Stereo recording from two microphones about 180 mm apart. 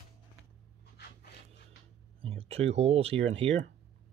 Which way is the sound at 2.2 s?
30° right (ahead or behind).